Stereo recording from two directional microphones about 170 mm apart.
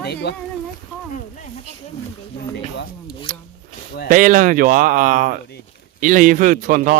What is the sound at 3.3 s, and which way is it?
Zipper, 50° right (ahead or behind).